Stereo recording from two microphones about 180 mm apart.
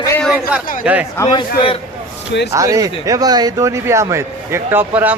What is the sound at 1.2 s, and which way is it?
Speech, 25° left (ahead or behind).